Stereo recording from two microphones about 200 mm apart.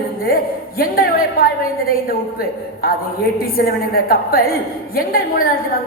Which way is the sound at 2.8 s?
50° left (ahead or behind).